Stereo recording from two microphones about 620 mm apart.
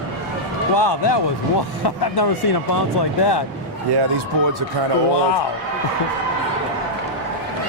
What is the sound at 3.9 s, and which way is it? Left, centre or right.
Speech, right.